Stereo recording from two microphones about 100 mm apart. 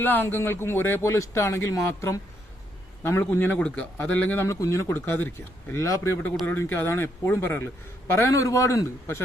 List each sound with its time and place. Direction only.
0.0 s a man's voice: 20° left (ahead or behind)